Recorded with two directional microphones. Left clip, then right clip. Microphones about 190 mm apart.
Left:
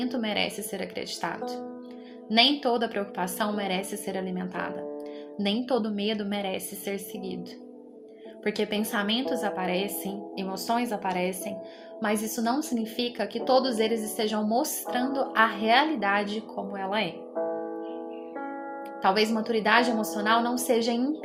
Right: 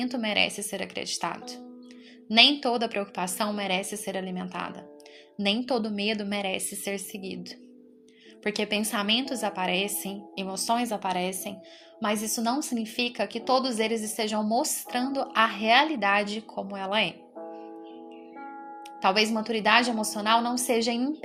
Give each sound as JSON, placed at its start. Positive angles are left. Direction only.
{"t": 0.0, "sound": "a woman's voice", "side_deg": -25}
{"t": 8.4, "sound": "a woman's voice", "side_deg": -25}
{"t": 17.4, "sound": "music", "side_deg": 30}
{"t": 19.0, "sound": "a woman's voice", "side_deg": -30}